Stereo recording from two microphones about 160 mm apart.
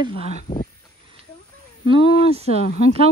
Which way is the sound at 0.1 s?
65° left (ahead or behind).